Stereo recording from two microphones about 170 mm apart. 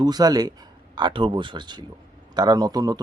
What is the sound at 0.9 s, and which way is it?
Speech, 30° right (ahead or behind).